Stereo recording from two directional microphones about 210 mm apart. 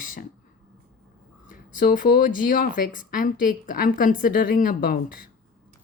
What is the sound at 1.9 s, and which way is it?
Speech, 45° left (ahead or behind).